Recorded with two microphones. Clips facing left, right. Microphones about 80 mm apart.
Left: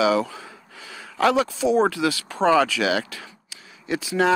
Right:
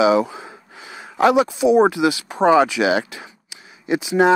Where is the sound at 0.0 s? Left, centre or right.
Right.